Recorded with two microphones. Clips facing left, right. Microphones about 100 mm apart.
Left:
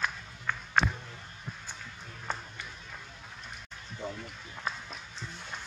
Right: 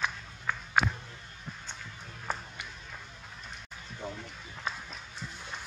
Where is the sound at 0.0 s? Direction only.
5° right (ahead or behind).